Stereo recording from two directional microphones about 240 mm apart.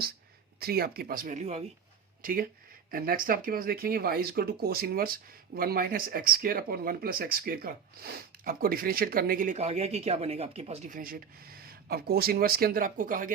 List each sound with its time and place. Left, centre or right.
0.6 s speech: right
2.2 s speech: right